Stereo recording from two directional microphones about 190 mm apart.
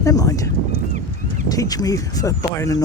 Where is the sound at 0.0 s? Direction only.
20° left (ahead or behind).